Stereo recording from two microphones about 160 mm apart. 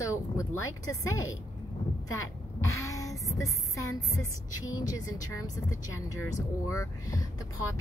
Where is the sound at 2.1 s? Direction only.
20° left (ahead or behind).